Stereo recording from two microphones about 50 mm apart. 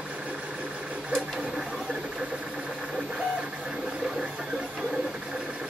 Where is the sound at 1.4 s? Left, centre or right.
Centre.